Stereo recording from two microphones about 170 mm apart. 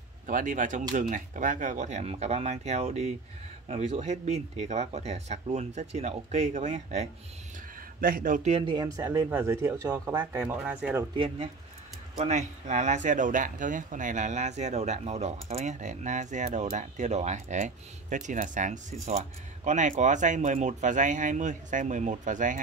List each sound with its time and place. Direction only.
0.3 s speech: 50° right (ahead or behind)
8.0 s speech: 55° right (ahead or behind)
8.6 s a man's voice: 20° right (ahead or behind)
11.1 s speech: 35° right (ahead or behind)